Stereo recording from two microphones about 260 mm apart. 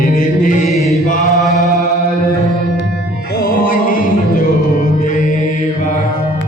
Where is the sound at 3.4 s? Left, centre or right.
Left.